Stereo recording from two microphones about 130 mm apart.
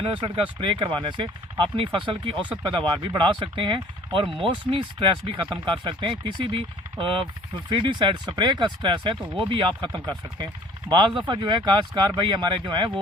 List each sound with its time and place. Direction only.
0.0 s speech: 40° right (ahead or behind)